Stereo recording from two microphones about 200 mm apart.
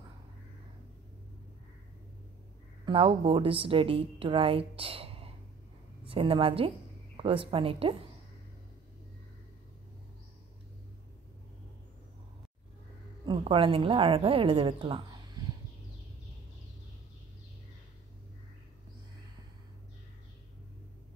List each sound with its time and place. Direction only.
2.8 s a woman's voice: 25° right (ahead or behind)
13.2 s a woman's voice: 25° right (ahead or behind)